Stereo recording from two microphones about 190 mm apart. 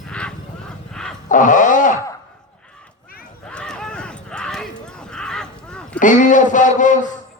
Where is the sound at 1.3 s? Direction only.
40° left (ahead or behind).